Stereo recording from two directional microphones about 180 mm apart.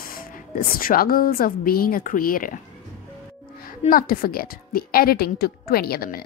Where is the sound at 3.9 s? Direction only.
50° left (ahead or behind).